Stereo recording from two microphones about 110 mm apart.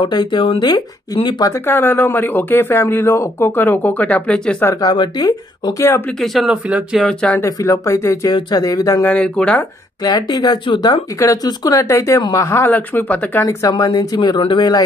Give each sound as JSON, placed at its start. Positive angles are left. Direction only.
{"t": 0.0, "sound": "speech", "side_deg": 45}
{"t": 1.7, "sound": "speech", "side_deg": 20}
{"t": 4.8, "sound": "speech", "side_deg": 40}
{"t": 6.2, "sound": "speech", "side_deg": 0}
{"t": 7.1, "sound": "speech", "side_deg": 10}
{"t": 7.4, "sound": "speech", "side_deg": 30}
{"t": 8.3, "sound": "speech", "side_deg": 40}
{"t": 9.0, "sound": "speech", "side_deg": 10}
{"t": 10.0, "sound": "speech", "side_deg": 35}